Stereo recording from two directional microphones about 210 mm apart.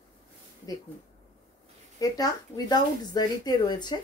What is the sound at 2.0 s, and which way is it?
Speech, 20° left (ahead or behind).